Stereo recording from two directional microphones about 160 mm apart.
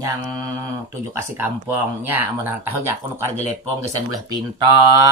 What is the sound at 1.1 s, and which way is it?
Speech, 10° right (ahead or behind).